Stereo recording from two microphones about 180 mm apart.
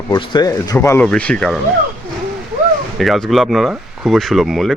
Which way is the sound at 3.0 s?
Centre (ahead or behind).